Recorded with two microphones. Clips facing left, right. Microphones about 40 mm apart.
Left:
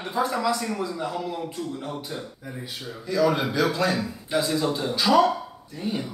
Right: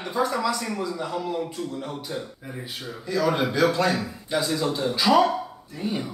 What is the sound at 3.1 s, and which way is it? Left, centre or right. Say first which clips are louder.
A man's voice: left 1 dB; centre.